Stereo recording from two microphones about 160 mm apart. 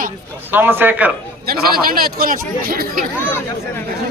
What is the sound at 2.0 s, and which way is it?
Speech, 65° right (ahead or behind).